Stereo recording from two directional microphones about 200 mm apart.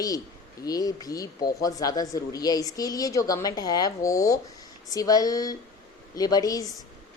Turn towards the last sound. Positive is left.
turn(degrees=20)  # may be behind; listen again after turning